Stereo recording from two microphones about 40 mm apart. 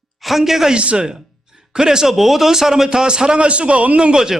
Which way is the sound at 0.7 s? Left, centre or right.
Right.